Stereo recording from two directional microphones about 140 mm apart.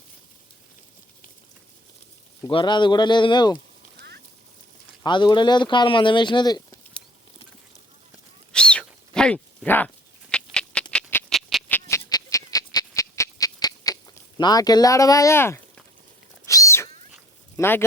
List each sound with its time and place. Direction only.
2.5 s speech: 35° left (ahead or behind)
5.0 s speech: 35° left (ahead or behind)
8.5 s a sound: 5° left (ahead or behind)
10.9 s squawk: 5° left (ahead or behind)
11.7 s squawk: 20° left (ahead or behind)
16.5 s a sound: 25° left (ahead or behind)
17.6 s speech: 15° left (ahead or behind)